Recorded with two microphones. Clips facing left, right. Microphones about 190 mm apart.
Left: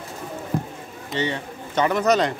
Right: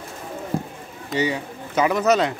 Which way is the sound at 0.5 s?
30° right (ahead or behind).